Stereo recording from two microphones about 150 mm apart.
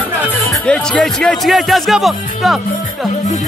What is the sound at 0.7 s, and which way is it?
Speech, 5° left (ahead or behind).